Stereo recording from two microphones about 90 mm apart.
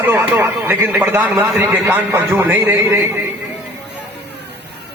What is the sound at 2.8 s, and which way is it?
Speech, 35° right (ahead or behind).